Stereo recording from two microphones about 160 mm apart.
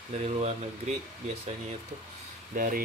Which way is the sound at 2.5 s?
60° right (ahead or behind).